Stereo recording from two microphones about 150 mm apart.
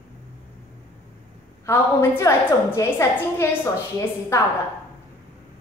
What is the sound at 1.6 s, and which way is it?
A woman's voice, 20° left (ahead or behind).